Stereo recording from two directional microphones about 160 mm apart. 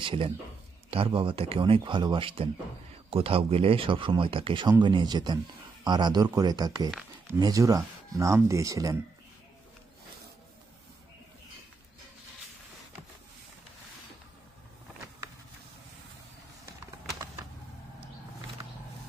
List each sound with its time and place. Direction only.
0.0 s speech: 35° right (ahead or behind)